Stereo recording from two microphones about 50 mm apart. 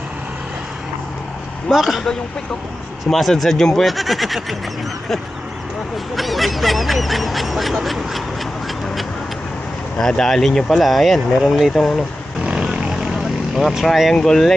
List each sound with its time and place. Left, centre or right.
1.7 s honk: centre
3.1 s honk: centre
6.1 s honk: centre
10.0 s speech: centre
10.8 s honk: centre
12.4 s vehicle: centre
13.1 s vehicle: centre
13.8 s speech: centre